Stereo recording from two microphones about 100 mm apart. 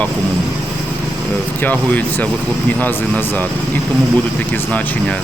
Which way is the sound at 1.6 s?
15° left (ahead or behind).